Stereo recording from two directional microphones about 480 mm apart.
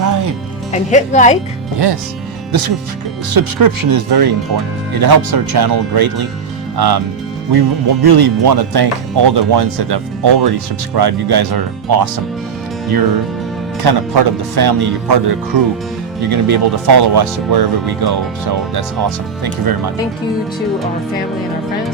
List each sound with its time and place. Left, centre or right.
0.0 s music: right
0.7 s speech: centre
2.5 s speech: right
13.8 s speech: right